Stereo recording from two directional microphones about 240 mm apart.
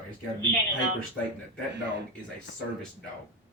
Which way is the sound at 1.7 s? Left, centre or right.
Right.